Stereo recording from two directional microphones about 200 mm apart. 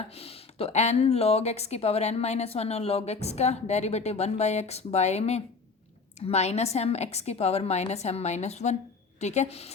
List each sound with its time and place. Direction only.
0.1 s speech: 30° left (ahead or behind)